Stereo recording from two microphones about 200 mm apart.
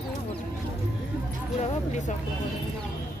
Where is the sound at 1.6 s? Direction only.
35° left (ahead or behind).